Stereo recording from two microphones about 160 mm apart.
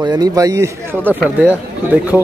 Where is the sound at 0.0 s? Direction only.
25° right (ahead or behind).